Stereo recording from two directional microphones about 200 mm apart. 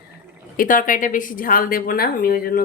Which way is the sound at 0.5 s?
45° left (ahead or behind).